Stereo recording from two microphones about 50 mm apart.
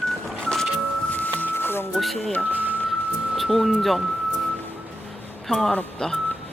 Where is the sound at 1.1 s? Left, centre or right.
Left.